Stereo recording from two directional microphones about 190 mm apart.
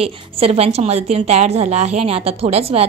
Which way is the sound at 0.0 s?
30° right (ahead or behind).